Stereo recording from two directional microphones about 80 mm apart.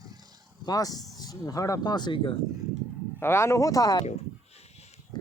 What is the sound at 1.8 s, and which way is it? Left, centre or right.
Speech, left.